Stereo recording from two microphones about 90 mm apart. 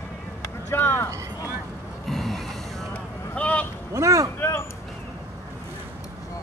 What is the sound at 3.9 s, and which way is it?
Vehicle, 40° right (ahead or behind).